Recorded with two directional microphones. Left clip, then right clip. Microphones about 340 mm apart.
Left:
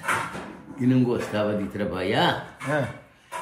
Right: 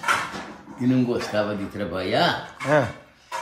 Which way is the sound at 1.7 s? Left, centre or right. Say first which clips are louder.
Right 5 dB; centre.